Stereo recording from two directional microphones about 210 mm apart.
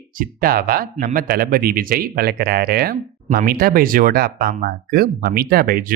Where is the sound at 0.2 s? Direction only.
45° right (ahead or behind).